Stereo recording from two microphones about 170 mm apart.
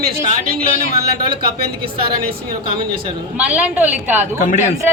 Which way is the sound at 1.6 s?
65° right (ahead or behind).